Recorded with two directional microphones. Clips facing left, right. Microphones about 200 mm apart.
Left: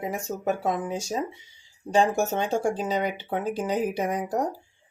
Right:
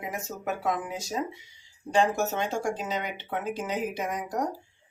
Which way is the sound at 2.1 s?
30° left (ahead or behind).